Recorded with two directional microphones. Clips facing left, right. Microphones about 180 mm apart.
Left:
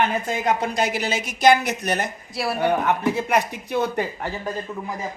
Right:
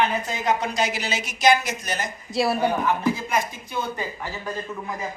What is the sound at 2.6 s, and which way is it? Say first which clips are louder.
Speech: left 2 dB; 65° left (ahead or behind).